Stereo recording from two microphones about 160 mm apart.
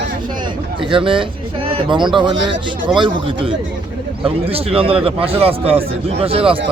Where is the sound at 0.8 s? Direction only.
30° right (ahead or behind).